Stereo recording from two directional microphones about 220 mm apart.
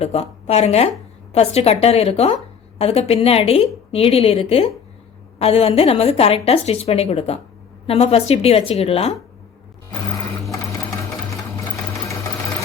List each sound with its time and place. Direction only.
0.0 s a woman's voice: 30° left (ahead or behind)